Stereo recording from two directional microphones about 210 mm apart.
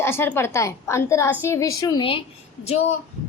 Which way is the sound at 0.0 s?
10° left (ahead or behind).